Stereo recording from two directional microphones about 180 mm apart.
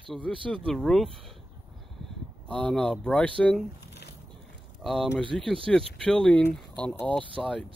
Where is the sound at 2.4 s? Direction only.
5° left (ahead or behind).